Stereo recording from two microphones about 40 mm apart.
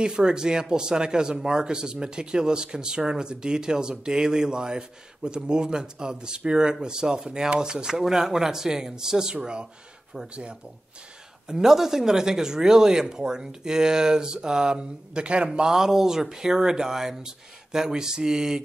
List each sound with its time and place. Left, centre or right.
0.0 s speech: centre
11.4 s speech: centre